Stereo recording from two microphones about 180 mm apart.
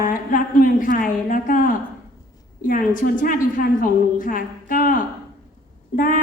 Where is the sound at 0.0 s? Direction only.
50° left (ahead or behind).